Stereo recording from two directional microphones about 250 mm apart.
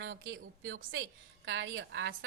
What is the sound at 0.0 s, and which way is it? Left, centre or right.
A woman's voice, right.